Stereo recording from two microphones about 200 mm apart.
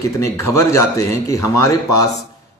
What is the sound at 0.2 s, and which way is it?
A man's voice, 15° left (ahead or behind).